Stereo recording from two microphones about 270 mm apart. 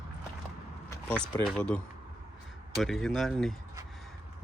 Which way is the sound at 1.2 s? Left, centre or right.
Centre.